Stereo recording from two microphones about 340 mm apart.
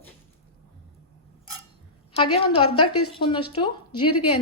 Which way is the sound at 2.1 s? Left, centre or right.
Centre.